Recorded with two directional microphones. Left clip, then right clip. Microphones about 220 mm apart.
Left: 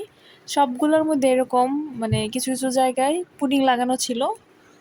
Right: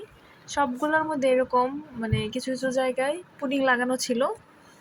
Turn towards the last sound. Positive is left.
turn(degrees=20)  # may be behind; listen again after turning